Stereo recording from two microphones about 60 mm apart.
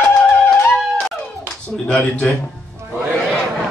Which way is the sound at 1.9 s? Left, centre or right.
Left.